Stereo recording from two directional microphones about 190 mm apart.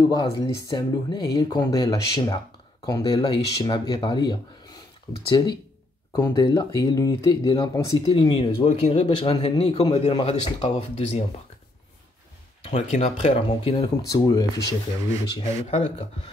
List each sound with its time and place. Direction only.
0.1 s speech: 20° left (ahead or behind)
12.7 s speech: 40° left (ahead or behind); by 14.8 s 20° left (ahead or behind)
15.3 s speech: 30° left (ahead or behind)